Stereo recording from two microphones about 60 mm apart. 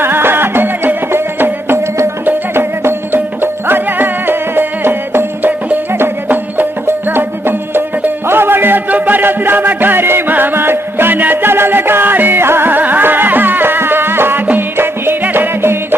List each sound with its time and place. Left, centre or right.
0.0 s music: right